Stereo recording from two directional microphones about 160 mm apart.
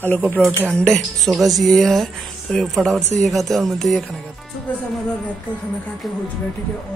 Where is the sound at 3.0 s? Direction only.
45° right (ahead or behind).